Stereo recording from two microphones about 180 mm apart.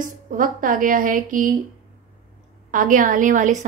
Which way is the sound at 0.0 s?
50° right (ahead or behind).